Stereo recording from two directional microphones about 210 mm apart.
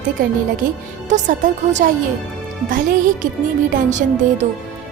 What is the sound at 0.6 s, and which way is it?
A woman's voice, 40° right (ahead or behind).